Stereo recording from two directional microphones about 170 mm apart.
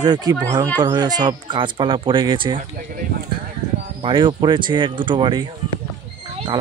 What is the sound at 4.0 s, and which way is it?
Speech, 30° right (ahead or behind).